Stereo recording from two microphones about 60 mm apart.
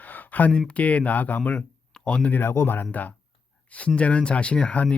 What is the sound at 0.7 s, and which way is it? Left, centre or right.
Speech, left.